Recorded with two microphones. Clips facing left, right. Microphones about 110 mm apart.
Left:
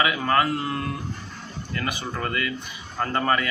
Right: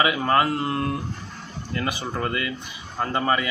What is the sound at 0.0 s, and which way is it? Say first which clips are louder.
A man's voice: right 1 dB; 25° right (ahead or behind).